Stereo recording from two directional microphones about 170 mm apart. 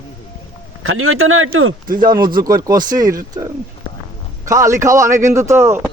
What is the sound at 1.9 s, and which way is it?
Speech, 25° right (ahead or behind).